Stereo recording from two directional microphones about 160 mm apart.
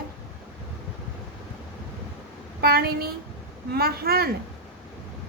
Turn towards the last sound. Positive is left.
turn(degrees=-75)  # may be behind; listen again after turning